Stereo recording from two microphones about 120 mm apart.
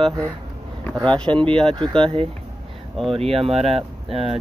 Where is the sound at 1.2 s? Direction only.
45° right (ahead or behind).